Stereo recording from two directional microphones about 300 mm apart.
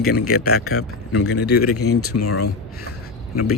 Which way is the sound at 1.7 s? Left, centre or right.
Left.